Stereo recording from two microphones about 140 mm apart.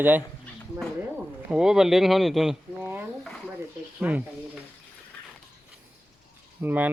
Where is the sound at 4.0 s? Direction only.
10° right (ahead or behind).